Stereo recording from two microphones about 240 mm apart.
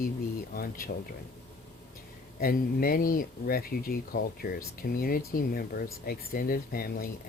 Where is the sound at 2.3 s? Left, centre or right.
Left.